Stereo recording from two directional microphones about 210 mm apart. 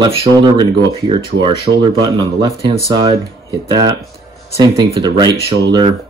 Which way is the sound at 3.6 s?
20° right (ahead or behind).